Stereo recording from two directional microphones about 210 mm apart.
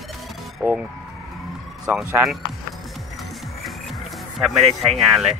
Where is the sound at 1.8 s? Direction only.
Centre (ahead or behind).